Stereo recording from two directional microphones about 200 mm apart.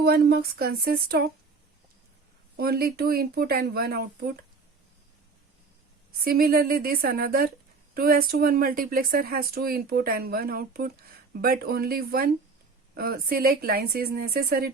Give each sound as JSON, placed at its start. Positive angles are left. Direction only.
{"t": 0.0, "sound": "a woman's voice", "side_deg": -50}
{"t": 2.6, "sound": "a woman's voice", "side_deg": -50}
{"t": 6.2, "sound": "a woman's voice", "side_deg": -50}